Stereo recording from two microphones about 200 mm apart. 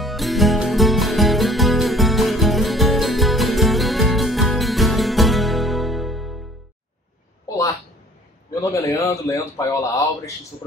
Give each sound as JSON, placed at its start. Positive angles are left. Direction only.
{"t": 0.0, "sound": "music", "side_deg": 0}
{"t": 7.4, "sound": "a sound", "side_deg": 15}
{"t": 8.6, "sound": "speech", "side_deg": 15}